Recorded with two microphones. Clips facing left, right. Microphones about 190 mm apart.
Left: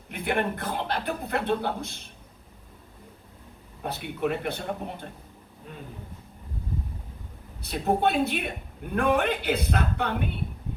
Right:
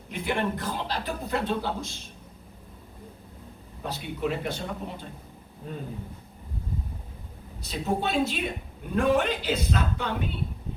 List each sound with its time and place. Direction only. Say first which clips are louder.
0.1 s a man's voice: left 1 dB; 60° left (ahead or behind)
3.8 s a man's voice: left 1 dB; 60° left (ahead or behind)
7.6 s a man's voice: left 4 dB; 60° left (ahead or behind)